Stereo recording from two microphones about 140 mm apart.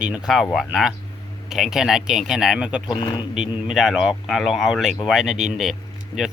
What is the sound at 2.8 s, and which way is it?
Speech, 30° left (ahead or behind).